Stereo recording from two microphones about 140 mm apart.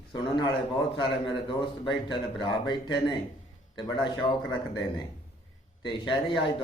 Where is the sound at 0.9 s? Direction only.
35° left (ahead or behind).